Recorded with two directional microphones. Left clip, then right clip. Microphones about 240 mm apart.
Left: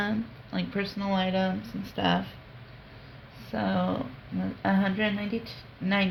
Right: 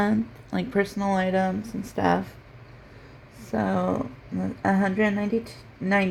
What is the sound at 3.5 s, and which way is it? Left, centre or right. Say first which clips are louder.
Speech: right 4 dB; right.